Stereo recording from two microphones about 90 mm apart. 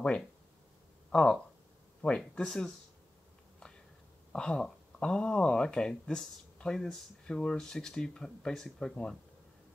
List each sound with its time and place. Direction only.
1.1 s speech: 10° left (ahead or behind)
4.3 s speech: 10° left (ahead or behind)